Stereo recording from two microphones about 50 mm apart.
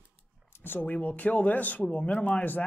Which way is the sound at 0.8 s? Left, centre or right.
Left.